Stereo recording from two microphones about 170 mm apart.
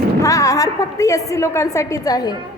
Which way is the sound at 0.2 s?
20° left (ahead or behind).